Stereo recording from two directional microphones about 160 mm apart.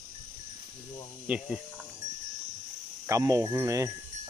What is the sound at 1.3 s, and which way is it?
Speech, 10° right (ahead or behind).